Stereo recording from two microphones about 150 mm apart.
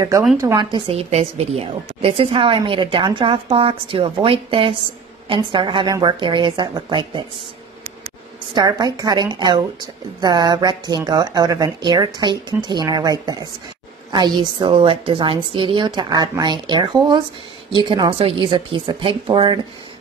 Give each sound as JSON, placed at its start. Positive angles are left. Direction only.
{"t": 0.6, "sound": "a woman's voice", "side_deg": -30}
{"t": 8.5, "sound": "a woman's voice", "side_deg": -25}